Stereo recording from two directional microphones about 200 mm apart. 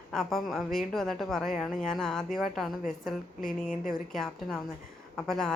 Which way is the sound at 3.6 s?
45° left (ahead or behind).